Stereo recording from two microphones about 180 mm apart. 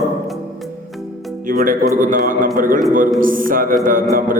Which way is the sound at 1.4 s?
50° right (ahead or behind).